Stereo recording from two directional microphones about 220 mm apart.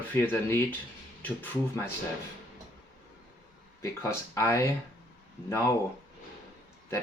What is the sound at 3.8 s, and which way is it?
Speech, 15° left (ahead or behind).